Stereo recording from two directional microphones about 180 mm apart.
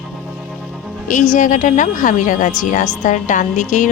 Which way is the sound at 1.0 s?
45° left (ahead or behind).